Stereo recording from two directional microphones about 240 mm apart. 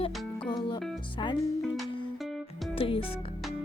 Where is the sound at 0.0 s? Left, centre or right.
Centre.